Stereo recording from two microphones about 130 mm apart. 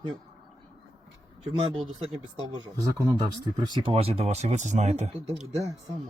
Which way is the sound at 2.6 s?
30° right (ahead or behind).